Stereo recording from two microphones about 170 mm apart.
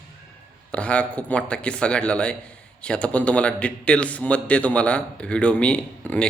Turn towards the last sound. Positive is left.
turn(degrees=5)  # may be behind; listen again after turning